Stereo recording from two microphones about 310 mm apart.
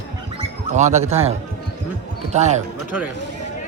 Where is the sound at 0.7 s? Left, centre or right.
Right.